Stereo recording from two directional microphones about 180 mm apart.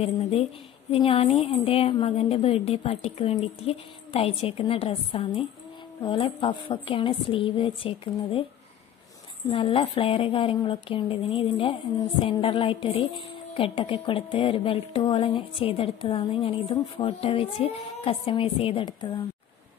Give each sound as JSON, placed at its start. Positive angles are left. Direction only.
{"t": 0.0, "sound": "a woman's voice", "side_deg": 35}
{"t": 9.5, "sound": "a woman's voice", "side_deg": 30}